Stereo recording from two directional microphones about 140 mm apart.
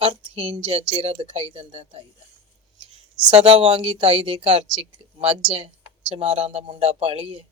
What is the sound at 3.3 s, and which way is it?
Speech, 40° right (ahead or behind).